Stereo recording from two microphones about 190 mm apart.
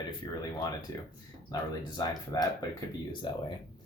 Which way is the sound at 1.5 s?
20° left (ahead or behind).